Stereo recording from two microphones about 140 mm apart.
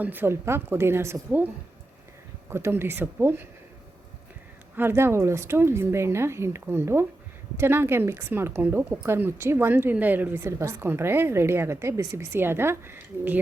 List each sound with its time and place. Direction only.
0.0 s a woman's voice: 15° right (ahead or behind)
2.5 s a woman's voice: 20° right (ahead or behind)
4.8 s a woman's voice: 15° right (ahead or behind)